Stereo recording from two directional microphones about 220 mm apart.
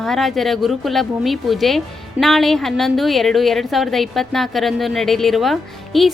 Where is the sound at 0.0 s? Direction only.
Centre (ahead or behind).